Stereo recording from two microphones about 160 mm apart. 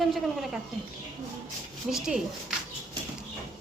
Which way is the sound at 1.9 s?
Centre (ahead or behind).